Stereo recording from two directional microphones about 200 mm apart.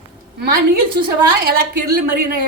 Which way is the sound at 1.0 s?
55° right (ahead or behind).